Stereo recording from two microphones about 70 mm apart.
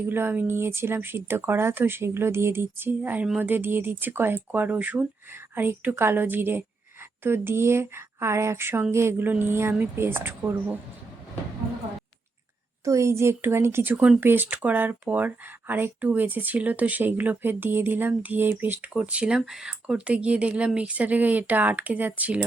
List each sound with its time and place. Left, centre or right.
0.1 s speech: right
12.8 s speech: right; by 19.4 s centre
19.4 s speech: centre; by 22.4 s right